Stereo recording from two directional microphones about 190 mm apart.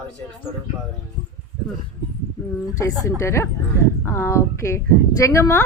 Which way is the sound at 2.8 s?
15° left (ahead or behind).